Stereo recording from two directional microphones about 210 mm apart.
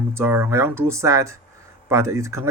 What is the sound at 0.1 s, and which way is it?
Speech, 10° right (ahead or behind).